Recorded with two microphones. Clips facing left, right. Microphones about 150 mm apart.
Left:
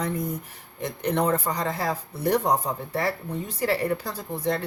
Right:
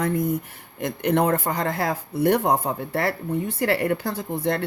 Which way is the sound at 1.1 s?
60° right (ahead or behind).